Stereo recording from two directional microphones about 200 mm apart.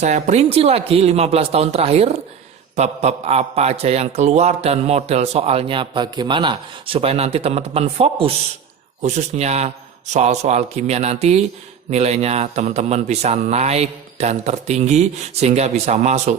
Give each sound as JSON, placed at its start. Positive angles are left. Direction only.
{"t": 0.0, "sound": "a man's voice", "side_deg": -35}